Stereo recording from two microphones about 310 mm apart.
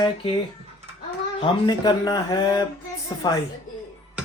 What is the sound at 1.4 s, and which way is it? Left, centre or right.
Speech, centre.